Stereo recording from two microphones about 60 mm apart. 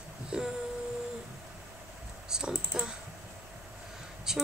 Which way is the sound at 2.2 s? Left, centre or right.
Centre.